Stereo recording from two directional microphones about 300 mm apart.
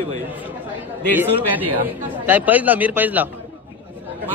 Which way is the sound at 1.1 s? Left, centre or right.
Centre.